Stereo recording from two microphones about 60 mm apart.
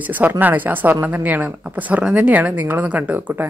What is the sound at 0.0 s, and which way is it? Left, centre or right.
Speech, right.